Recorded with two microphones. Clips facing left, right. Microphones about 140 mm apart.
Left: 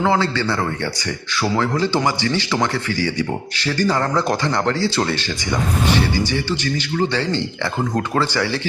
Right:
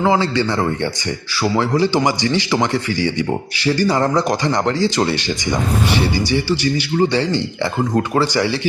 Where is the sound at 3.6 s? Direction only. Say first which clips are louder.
Right 3 dB; 10° right (ahead or behind).